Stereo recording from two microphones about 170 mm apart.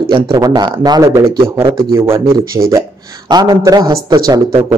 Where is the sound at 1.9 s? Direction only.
15° right (ahead or behind).